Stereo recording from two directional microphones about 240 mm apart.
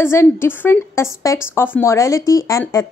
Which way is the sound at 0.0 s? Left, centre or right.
Centre.